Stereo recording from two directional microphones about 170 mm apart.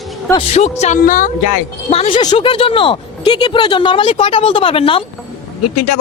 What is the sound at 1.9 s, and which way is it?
Speech, 35° left (ahead or behind).